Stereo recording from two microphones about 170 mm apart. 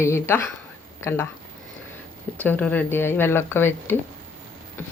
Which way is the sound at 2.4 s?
10° left (ahead or behind).